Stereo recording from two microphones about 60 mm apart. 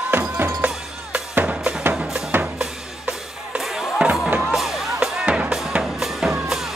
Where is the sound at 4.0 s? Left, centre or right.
Centre.